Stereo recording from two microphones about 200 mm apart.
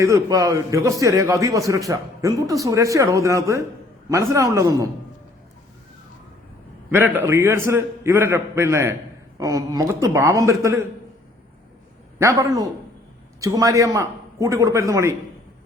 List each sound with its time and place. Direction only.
0.0 s a man's voice: 15° right (ahead or behind)
6.9 s a man's voice: 10° right (ahead or behind)
12.2 s a man's voice: 15° right (ahead or behind)